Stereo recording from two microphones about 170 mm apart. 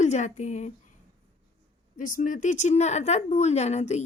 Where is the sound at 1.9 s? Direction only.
50° left (ahead or behind).